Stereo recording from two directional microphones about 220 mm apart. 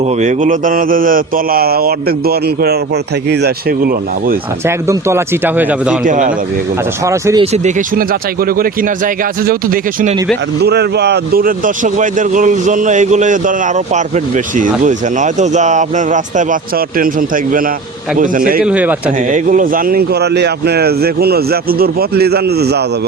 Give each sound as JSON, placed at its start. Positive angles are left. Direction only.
{"t": 0.0, "sound": "mantra", "side_deg": -30}
{"t": 4.6, "sound": "speech", "side_deg": -10}
{"t": 6.1, "sound": "speech", "side_deg": -35}
{"t": 7.0, "sound": "speech", "side_deg": -15}
{"t": 7.5, "sound": "speech", "side_deg": -35}
{"t": 18.6, "sound": "a man's voice", "side_deg": -5}
{"t": 19.3, "sound": "mantra", "side_deg": -35}